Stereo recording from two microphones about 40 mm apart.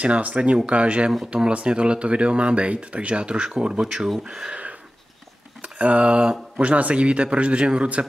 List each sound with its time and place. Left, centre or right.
0.0 s a man's voice: right; by 4.1 s centre
4.5 s a sound: right
5.6 s a man's voice: right